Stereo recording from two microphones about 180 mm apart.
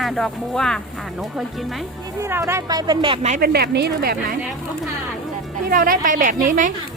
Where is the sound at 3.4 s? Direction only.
60° right (ahead or behind).